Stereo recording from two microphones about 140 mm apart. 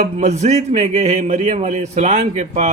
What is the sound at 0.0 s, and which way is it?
A man's voice, 55° right (ahead or behind).